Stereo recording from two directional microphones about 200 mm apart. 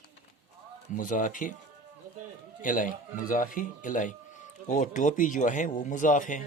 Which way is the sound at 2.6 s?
40° left (ahead or behind).